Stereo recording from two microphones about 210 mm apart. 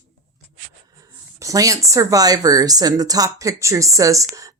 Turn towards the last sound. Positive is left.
turn(degrees=-15)  # may be behind; listen again after turning